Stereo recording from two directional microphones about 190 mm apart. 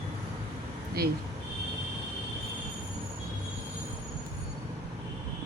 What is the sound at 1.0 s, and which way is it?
Speech, 55° right (ahead or behind).